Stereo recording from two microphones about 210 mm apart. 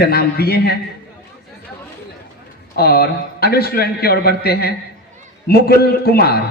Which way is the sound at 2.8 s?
50° left (ahead or behind).